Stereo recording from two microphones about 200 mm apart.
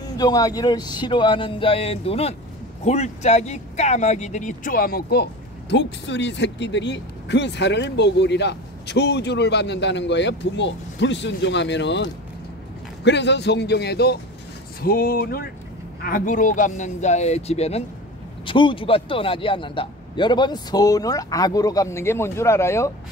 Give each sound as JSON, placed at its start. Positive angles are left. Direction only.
{"t": 0.0, "sound": "a man's voice", "side_deg": 20}